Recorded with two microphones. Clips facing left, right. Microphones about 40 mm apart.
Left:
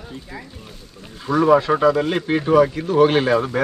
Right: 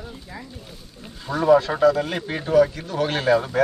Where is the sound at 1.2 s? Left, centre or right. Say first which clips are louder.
Left 2 dB; left.